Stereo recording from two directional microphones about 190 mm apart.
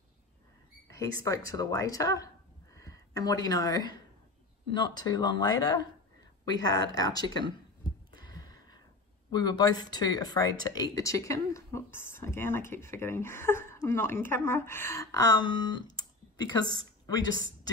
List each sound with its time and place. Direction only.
0.8 s speech: 15° left (ahead or behind)
2.7 s a sound: 15° left (ahead or behind)
4.7 s speech: 20° left (ahead or behind)
7.0 s speech: 20° left (ahead or behind)
8.3 s a sound: 20° left (ahead or behind)
9.3 s a woman's voice: 20° left (ahead or behind)